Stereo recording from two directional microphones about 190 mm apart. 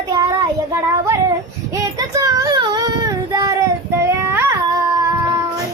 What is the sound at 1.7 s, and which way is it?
Child singing, 20° right (ahead or behind).